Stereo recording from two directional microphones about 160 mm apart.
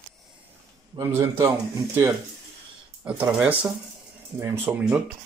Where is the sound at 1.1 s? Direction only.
15° right (ahead or behind).